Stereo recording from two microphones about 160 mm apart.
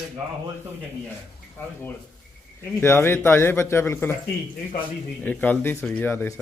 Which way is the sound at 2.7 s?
15° left (ahead or behind).